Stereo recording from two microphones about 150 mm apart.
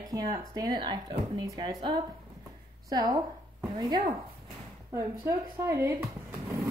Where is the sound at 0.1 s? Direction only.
25° right (ahead or behind).